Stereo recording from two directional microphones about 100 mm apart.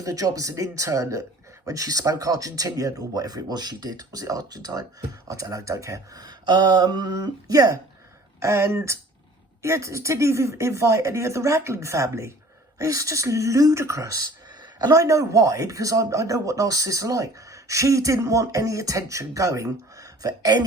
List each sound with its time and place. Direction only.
0.0 s speech: 35° right (ahead or behind)
14.6 s speech: 40° right (ahead or behind)